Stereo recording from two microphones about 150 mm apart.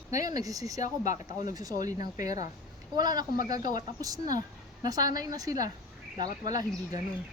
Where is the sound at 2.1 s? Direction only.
25° right (ahead or behind).